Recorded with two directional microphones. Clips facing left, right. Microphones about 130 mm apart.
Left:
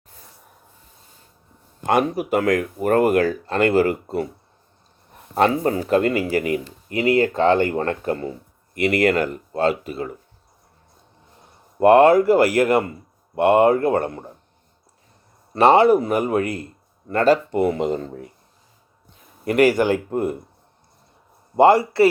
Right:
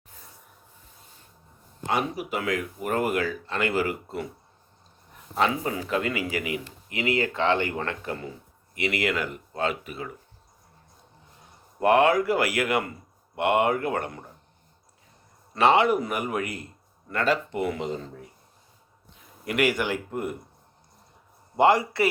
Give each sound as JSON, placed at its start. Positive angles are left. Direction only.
{"t": 1.9, "sound": "speech", "side_deg": 50}
{"t": 5.3, "sound": "speech", "side_deg": 45}
{"t": 11.8, "sound": "speech", "side_deg": 40}
{"t": 15.5, "sound": "speech", "side_deg": 40}
{"t": 17.8, "sound": "speech", "side_deg": 55}
{"t": 19.5, "sound": "speech", "side_deg": 40}
{"t": 21.5, "sound": "a man's voice", "side_deg": 35}